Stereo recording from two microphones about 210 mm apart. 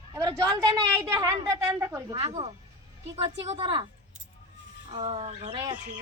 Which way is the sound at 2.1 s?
25° right (ahead or behind).